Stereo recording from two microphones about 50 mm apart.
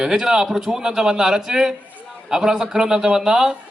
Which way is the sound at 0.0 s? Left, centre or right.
Centre.